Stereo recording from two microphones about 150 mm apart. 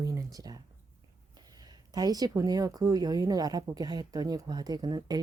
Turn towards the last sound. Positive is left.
turn(degrees=-25)  # may be behind; listen again after turning